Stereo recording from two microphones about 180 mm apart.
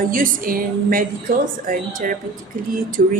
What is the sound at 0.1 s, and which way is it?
Speech, 50° right (ahead or behind).